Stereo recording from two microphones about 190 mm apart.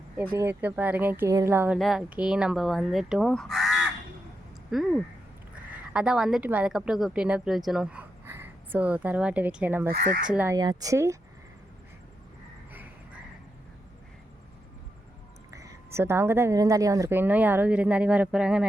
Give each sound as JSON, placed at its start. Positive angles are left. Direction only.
{"t": 0.3, "sound": "a woman's voice", "side_deg": -10}
{"t": 5.9, "sound": "a woman's voice", "side_deg": -5}
{"t": 9.9, "sound": "speech", "side_deg": -40}
{"t": 10.2, "sound": "a woman's voice", "side_deg": -10}
{"t": 15.5, "sound": "a woman's voice", "side_deg": -15}